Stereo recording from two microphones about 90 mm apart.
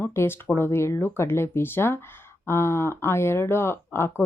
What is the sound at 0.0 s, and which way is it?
Speech, 25° left (ahead or behind).